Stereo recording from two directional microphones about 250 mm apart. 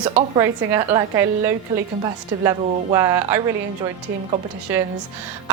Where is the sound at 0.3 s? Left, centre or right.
Centre.